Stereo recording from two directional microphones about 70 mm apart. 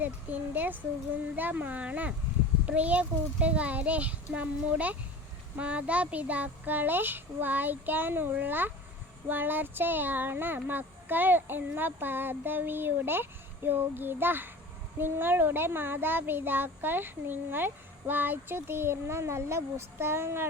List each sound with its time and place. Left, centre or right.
0.0 s a child's voice: right